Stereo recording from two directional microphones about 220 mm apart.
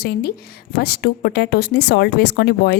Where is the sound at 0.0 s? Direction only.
45° left (ahead or behind).